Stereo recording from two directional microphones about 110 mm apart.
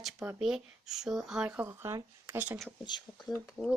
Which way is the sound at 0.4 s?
5° right (ahead or behind).